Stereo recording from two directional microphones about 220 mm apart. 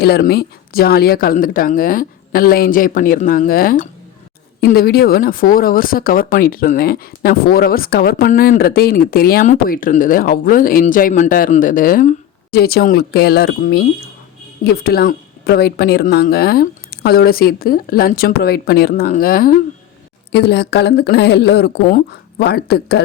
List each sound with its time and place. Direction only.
0.0 s a woman's voice: 45° left (ahead or behind)